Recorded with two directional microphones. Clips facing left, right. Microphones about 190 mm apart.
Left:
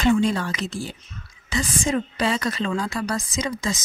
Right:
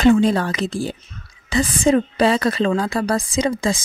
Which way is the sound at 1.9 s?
35° right (ahead or behind).